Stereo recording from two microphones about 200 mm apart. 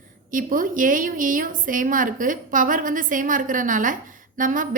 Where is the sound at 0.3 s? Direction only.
40° right (ahead or behind).